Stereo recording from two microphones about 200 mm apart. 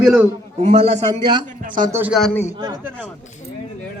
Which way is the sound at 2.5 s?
20° right (ahead or behind).